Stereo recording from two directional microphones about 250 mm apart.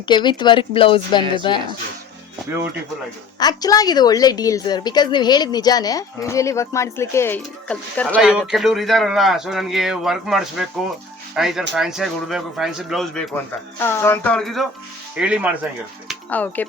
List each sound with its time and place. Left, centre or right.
0.0 s speech: centre
3.3 s a woman's voice: centre
16.0 s a sound: centre